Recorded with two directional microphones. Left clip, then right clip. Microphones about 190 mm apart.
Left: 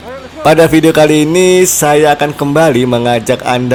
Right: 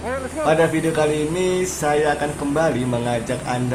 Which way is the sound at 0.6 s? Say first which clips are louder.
Left 12 dB; 45° left (ahead or behind).